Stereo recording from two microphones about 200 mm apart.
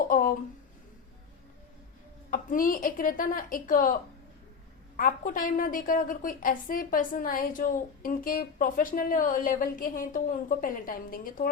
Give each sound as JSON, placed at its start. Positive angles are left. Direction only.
{"t": 0.1, "sound": "a sound", "side_deg": 45}
{"t": 2.3, "sound": "a woman's voice", "side_deg": 45}
{"t": 4.9, "sound": "a woman's voice", "side_deg": 45}